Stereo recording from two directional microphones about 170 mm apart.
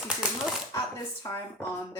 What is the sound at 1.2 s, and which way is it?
Speech, 20° left (ahead or behind).